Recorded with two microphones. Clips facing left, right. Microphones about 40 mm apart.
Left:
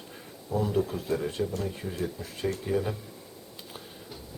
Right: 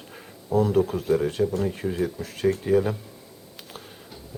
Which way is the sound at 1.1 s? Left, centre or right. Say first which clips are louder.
Right 9 dB; centre.